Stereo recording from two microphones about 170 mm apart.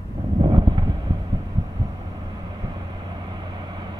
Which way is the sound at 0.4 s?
30° right (ahead or behind).